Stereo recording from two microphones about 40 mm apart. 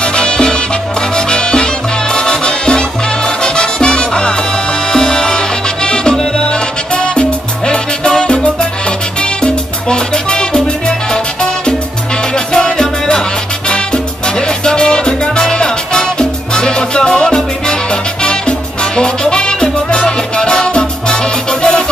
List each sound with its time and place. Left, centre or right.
0.0 s music: left
12.5 s music: centre
18.9 s music: left